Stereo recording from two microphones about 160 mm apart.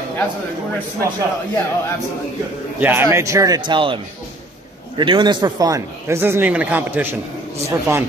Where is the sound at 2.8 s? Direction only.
15° right (ahead or behind).